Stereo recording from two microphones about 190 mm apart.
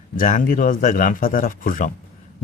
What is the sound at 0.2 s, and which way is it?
Speech, 45° left (ahead or behind).